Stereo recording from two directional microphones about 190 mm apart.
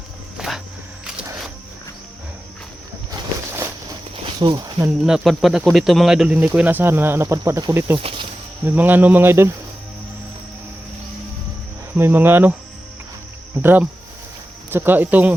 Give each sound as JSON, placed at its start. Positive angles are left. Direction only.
{"t": 0.3, "sound": "walk", "side_deg": 0}
{"t": 3.1, "sound": "a sound", "side_deg": -15}
{"t": 4.4, "sound": "speech", "side_deg": -20}
{"t": 4.9, "sound": "speech", "side_deg": -5}
{"t": 7.9, "sound": "speech", "side_deg": -25}
{"t": 8.6, "sound": "speech", "side_deg": -10}
{"t": 11.9, "sound": "speech", "side_deg": -10}
{"t": 13.6, "sound": "speech", "side_deg": -10}